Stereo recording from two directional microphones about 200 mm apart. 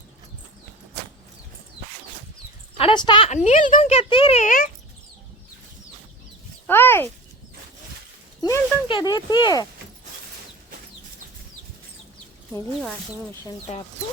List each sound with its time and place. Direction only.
2.7 s speech: 25° left (ahead or behind); by 4.7 s 40° left (ahead or behind)
6.7 s speech: 10° left (ahead or behind)
8.4 s speech: 20° left (ahead or behind)